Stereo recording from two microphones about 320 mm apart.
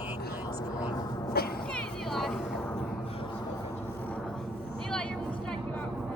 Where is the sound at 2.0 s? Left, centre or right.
Centre.